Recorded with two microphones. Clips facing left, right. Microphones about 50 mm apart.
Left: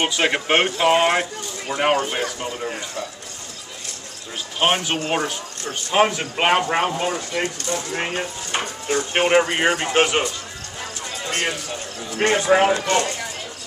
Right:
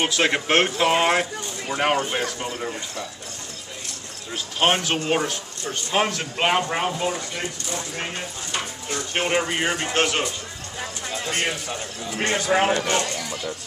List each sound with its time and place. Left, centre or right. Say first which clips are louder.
0.0 s speech: left 1 dB; centre
4.6 s speech: left 1 dB; centre
12.2 s speech: left 4 dB; centre